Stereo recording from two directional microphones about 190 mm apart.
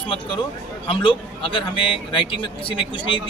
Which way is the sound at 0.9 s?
25° left (ahead or behind).